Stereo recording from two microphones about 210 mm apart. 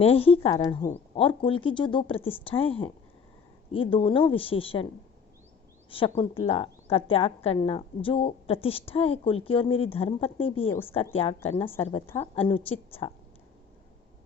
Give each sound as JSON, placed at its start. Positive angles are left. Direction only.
{"t": 0.0, "sound": "a woman's voice", "side_deg": 25}
{"t": 5.9, "sound": "a woman's voice", "side_deg": 25}